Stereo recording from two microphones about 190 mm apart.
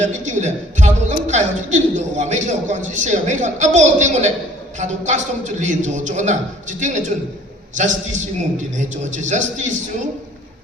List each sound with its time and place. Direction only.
0.0 s a man's voice: 40° right (ahead or behind)